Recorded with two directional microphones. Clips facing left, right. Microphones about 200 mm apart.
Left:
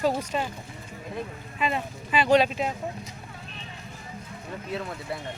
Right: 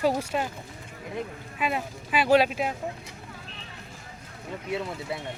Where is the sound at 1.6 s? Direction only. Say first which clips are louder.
Left 1 dB; 5° right (ahead or behind).